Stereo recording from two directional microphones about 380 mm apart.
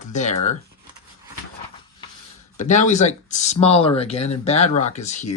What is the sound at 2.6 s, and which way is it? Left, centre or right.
Speech, centre.